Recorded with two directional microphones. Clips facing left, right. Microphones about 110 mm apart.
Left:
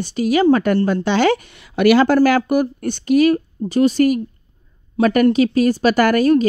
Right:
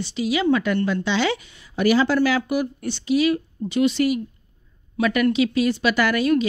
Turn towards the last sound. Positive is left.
turn(degrees=40)  # may be behind; listen again after turning